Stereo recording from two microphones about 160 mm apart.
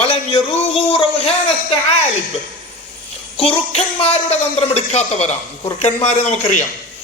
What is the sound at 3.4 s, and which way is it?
Speech, 35° left (ahead or behind).